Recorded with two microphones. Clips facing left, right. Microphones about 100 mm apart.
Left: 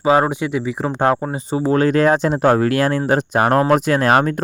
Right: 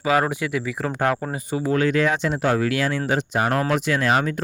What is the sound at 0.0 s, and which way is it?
Speech, 30° left (ahead or behind).